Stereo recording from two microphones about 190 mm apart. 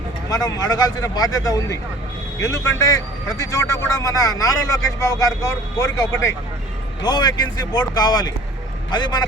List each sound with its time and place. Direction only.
0.3 s a man's voice: 20° left (ahead or behind)